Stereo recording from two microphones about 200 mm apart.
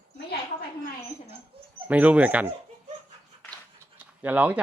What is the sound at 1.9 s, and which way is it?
Speech, 5° right (ahead or behind).